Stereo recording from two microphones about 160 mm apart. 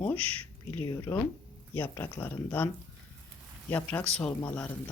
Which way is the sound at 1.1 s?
15° left (ahead or behind).